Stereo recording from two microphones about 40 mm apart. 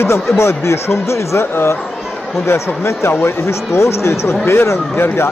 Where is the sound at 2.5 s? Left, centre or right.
Left.